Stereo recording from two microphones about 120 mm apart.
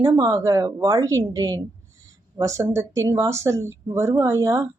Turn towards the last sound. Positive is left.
turn(degrees=-25)  # may be behind; listen again after turning